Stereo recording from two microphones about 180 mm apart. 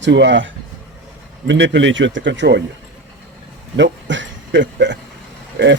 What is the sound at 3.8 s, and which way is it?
Speech, 90° right.